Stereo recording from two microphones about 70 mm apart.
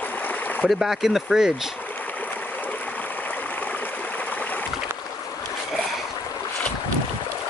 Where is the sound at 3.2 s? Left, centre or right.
Left.